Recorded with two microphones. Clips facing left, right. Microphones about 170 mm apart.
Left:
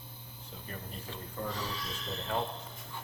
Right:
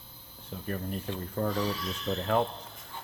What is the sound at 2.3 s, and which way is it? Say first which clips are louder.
Speech: right 7 dB; 60° right (ahead or behind).